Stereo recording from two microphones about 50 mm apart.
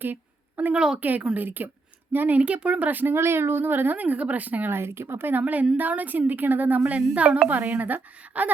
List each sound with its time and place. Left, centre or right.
0.0 s a sound: right
0.7 s a woman's voice: centre
0.9 s speech: right
2.4 s speech: right
2.9 s speech: right
3.2 s speech: right
4.7 s speech: right
7.1 s speech: right
7.8 s speech: right